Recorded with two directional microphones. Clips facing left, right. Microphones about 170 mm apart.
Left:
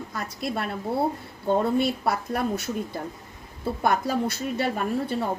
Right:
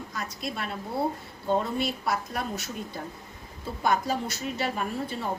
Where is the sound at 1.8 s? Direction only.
55° left (ahead or behind).